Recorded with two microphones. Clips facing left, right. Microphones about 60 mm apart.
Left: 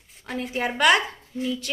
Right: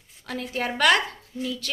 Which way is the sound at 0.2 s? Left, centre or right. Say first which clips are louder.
Left 2 dB; left.